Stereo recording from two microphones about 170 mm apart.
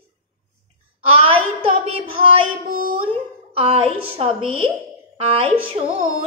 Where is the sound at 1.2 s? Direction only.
35° right (ahead or behind).